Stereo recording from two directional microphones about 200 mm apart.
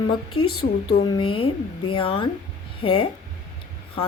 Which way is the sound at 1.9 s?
25° left (ahead or behind).